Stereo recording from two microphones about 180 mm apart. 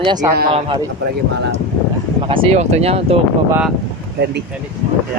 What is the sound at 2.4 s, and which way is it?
Speech, 35° right (ahead or behind).